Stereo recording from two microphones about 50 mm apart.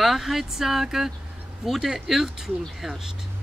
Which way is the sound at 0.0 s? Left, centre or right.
Centre.